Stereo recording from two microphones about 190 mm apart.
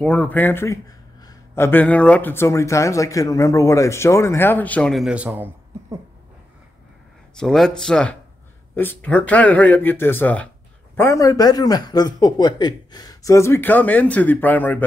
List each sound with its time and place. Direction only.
0.0 s speech: 5° left (ahead or behind); by 5.9 s 10° right (ahead or behind)
7.3 s speech: centre (ahead or behind)